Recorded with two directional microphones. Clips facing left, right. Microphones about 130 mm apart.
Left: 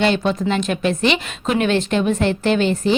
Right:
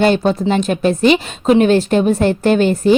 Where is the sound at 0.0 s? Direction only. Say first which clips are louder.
Right 4 dB; 40° right (ahead or behind).